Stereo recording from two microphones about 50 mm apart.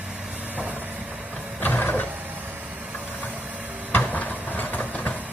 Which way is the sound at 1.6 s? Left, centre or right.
Left.